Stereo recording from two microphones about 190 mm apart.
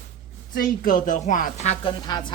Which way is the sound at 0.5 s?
50° left (ahead or behind).